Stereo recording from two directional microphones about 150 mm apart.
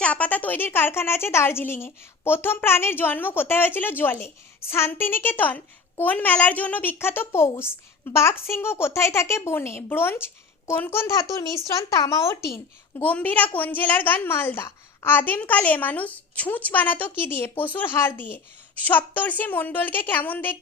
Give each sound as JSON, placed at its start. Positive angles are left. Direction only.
{"t": 0.0, "sound": "a woman's voice", "side_deg": 10}